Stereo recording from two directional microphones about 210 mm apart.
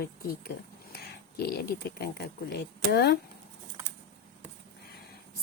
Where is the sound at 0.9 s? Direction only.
50° left (ahead or behind).